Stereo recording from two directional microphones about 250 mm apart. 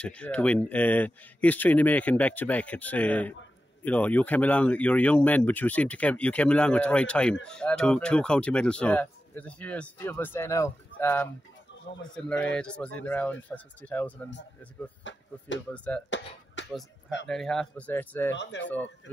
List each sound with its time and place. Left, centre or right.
0.0 s speech: centre
15.0 s speech: left
15.7 s speech: centre
16.6 s a sound: left
17.3 s speech: centre
18.3 s speech: left